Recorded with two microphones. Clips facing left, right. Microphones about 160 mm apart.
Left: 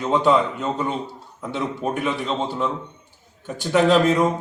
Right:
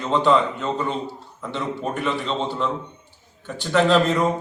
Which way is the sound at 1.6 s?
5° left (ahead or behind).